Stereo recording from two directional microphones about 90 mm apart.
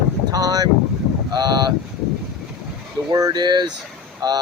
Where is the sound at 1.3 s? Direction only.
50° right (ahead or behind).